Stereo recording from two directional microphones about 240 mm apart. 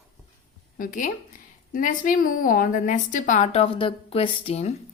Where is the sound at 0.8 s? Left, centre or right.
Left.